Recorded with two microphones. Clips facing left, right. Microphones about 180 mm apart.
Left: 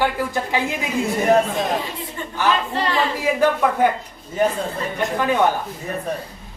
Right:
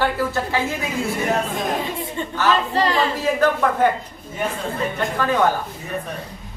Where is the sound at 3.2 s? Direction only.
10° left (ahead or behind).